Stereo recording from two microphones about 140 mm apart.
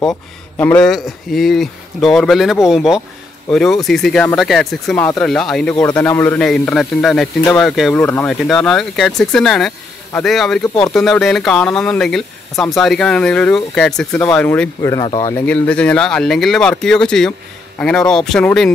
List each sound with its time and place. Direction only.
0.6 s speech: 10° left (ahead or behind)
0.8 s speech: centre (ahead or behind)
7.9 s speech: 10° left (ahead or behind)
8.4 s speech: centre (ahead or behind)
14.8 s speech: 25° left (ahead or behind)
15.4 s speech: 10° left (ahead or behind)